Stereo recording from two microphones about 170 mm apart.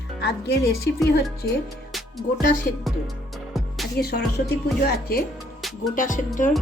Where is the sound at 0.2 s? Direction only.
70° left (ahead or behind).